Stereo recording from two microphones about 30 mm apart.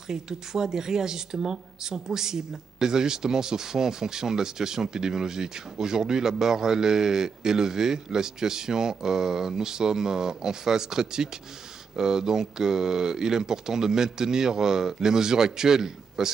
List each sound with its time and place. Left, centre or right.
0.1 s speech: centre